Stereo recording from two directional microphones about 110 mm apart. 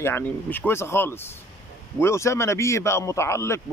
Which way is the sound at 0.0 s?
20° left (ahead or behind).